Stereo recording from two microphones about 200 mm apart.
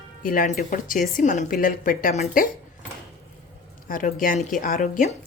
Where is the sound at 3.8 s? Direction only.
45° left (ahead or behind).